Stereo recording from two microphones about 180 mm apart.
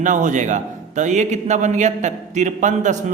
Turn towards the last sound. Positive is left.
turn(degrees=-45)  # may be behind; listen again after turning